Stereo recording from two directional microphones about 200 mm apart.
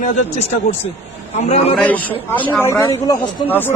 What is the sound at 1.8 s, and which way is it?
A man's voice, 10° left (ahead or behind).